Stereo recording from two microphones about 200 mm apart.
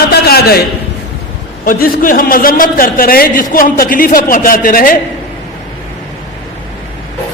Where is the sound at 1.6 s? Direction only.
45° left (ahead or behind).